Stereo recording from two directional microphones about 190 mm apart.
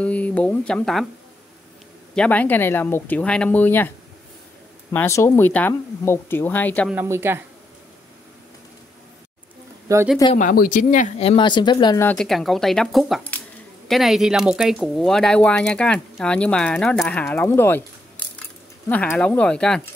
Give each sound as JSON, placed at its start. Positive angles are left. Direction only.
{"t": 0.0, "sound": "speech", "side_deg": 5}
{"t": 2.1, "sound": "speech", "side_deg": 5}
{"t": 4.9, "sound": "speech", "side_deg": 15}
{"t": 6.9, "sound": "a woman's voice", "side_deg": -10}
{"t": 9.9, "sound": "a woman's voice", "side_deg": -15}
{"t": 10.3, "sound": "speech", "side_deg": 45}
{"t": 11.2, "sound": "speech", "side_deg": 25}
{"t": 12.0, "sound": "speech", "side_deg": 5}
{"t": 18.9, "sound": "speech", "side_deg": 5}